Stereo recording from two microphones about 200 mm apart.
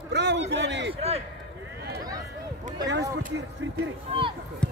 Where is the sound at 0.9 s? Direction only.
30° right (ahead or behind).